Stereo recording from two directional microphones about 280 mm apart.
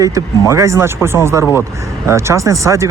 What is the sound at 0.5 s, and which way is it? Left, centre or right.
Speech, centre.